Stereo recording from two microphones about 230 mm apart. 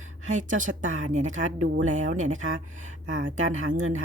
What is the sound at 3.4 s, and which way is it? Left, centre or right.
Speech, right.